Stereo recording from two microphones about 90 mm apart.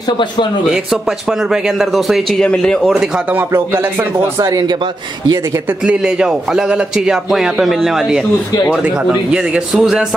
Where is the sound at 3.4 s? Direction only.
25° right (ahead or behind).